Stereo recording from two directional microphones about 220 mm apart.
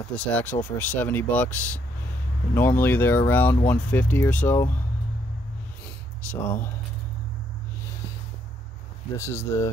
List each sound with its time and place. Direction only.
0.1 s speech: 5° left (ahead or behind)
6.2 s speech: 10° left (ahead or behind)
9.1 s speech: 15° left (ahead or behind)